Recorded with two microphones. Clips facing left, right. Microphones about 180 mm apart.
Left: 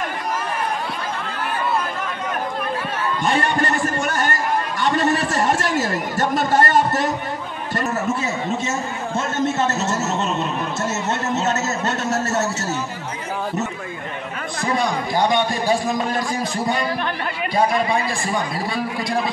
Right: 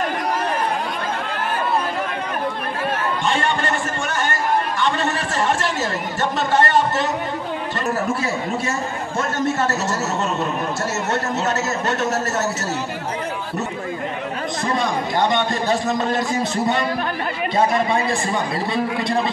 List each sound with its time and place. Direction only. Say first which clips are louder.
3.3 s a man's voice: left 2 dB; 40° left (ahead or behind)
9.6 s a man's voice: even; 20° left (ahead or behind)
11.4 s a man's voice: even; 25° left (ahead or behind)
15.9 s a man's voice: right 2 dB; 25° right (ahead or behind)